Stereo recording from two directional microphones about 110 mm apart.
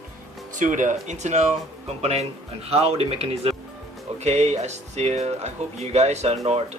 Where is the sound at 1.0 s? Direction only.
90° right.